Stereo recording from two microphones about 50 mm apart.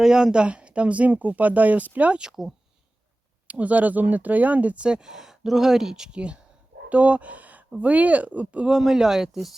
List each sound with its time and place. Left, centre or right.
0.0 s speech: centre; by 2.1 s right
2.1 s speech: centre
3.4 s speech: right; by 6.1 s centre
6.1 s speech: right
8.6 s speech: centre